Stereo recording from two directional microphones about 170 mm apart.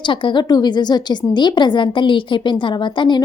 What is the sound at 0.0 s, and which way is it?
A woman's voice, 30° left (ahead or behind).